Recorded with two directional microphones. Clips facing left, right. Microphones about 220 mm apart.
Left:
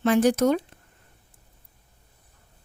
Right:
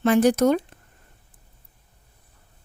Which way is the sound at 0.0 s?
55° right (ahead or behind).